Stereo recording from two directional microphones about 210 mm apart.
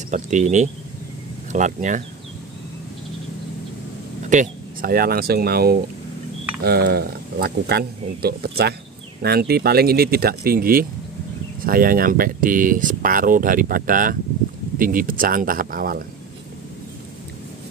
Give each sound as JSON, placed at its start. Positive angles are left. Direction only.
{"t": 0.1, "sound": "speech", "side_deg": -35}
{"t": 4.3, "sound": "speech", "side_deg": -40}